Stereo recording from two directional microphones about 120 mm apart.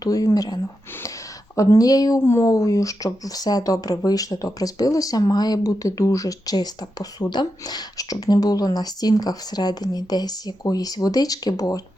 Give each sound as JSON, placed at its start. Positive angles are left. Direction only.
{"t": 0.0, "sound": "speech", "side_deg": 30}